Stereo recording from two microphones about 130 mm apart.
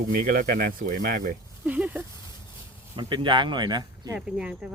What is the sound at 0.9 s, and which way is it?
Speech, 90° right.